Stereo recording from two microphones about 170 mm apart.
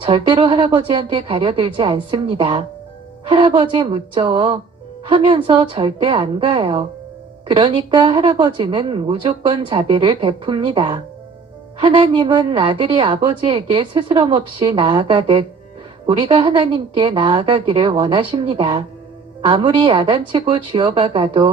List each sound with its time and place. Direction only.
0.0 s a woman's voice: 30° right (ahead or behind)